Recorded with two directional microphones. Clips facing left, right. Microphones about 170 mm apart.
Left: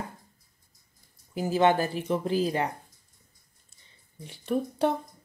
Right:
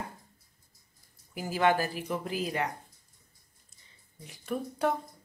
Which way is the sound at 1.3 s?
25° left (ahead or behind).